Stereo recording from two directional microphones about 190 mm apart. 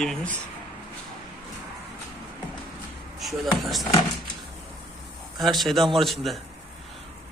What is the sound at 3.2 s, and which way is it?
Speech, centre (ahead or behind).